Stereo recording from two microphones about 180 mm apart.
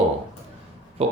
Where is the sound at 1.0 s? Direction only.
35° right (ahead or behind).